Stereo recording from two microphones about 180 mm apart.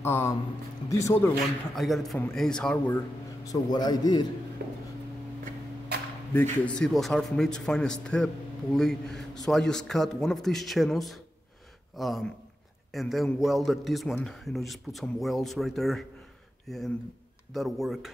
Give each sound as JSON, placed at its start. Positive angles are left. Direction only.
{"t": 0.0, "sound": "speech", "side_deg": 15}
{"t": 1.8, "sound": "a man's voice", "side_deg": 0}
{"t": 3.4, "sound": "a man's voice", "side_deg": 20}
{"t": 4.6, "sound": "music", "side_deg": -60}
{"t": 6.3, "sound": "a man's voice", "side_deg": 10}